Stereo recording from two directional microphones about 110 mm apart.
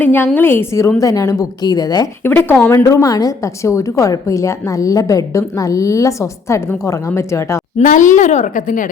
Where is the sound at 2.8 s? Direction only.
35° left (ahead or behind).